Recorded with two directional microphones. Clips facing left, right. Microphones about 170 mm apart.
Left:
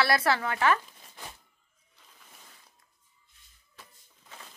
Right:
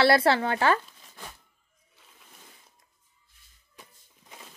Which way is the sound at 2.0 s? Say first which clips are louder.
Right 1 dB; centre (ahead or behind).